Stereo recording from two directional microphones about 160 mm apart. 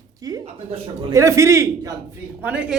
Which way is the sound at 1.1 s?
20° right (ahead or behind).